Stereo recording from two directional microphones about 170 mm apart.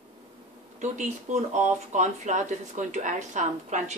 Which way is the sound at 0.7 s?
45° right (ahead or behind).